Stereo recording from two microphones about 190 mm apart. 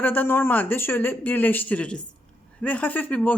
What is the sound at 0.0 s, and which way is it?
Speech, 10° left (ahead or behind).